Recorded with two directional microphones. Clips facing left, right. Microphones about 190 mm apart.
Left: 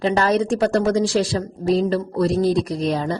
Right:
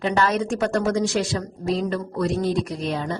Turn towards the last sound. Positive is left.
turn(degrees=35)  # may be behind; listen again after turning